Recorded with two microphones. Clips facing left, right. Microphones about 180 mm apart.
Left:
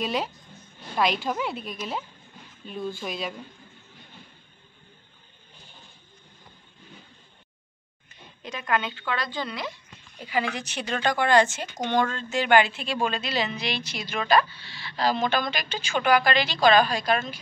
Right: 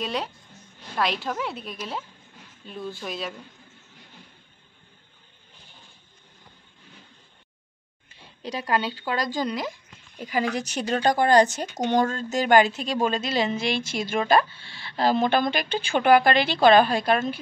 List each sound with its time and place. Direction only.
0.0 s a woman's voice: 5° left (ahead or behind)
8.1 s speech: 35° right (ahead or behind); by 17.4 s 55° right (ahead or behind)